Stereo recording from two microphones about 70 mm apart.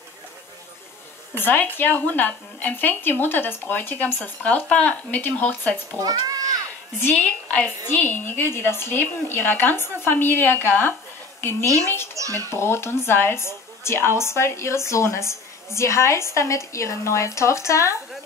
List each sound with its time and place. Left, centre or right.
1.3 s speech: left
5.9 s a child's voice: right
7.0 s a woman's voice: left
12.2 s a child's voice: right
12.4 s a woman's voice: left